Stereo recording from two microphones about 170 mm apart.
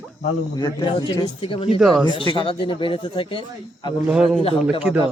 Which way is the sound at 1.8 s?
Centre (ahead or behind).